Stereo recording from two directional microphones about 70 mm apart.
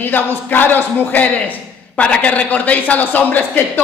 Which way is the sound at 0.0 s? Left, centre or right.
Left.